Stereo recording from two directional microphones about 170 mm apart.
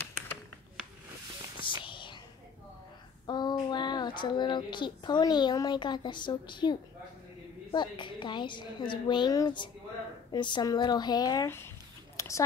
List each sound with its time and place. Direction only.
1.6 s whispering: 30° left (ahead or behind)
3.3 s a woman's voice: 25° left (ahead or behind)
12.2 s a sound: 20° left (ahead or behind)